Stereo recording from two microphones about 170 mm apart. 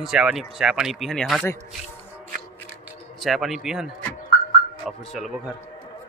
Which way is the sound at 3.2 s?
Centre (ahead or behind).